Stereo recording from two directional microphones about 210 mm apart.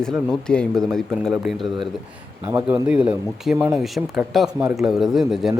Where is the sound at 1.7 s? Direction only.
20° right (ahead or behind).